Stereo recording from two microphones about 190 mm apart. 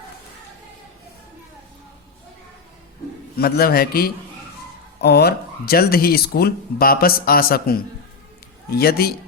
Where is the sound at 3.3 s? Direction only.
55° left (ahead or behind).